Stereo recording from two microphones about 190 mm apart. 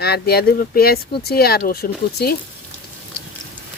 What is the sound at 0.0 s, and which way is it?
Speech, 55° left (ahead or behind).